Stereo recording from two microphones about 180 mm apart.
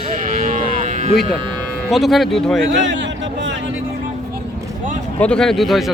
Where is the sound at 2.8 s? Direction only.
90° right.